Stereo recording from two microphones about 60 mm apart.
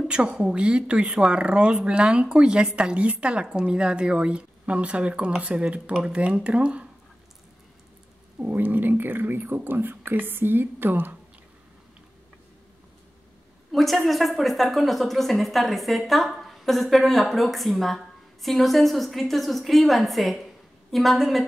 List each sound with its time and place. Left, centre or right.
0.1 s a woman's voice: centre
8.4 s speech: right
13.7 s a woman's voice: centre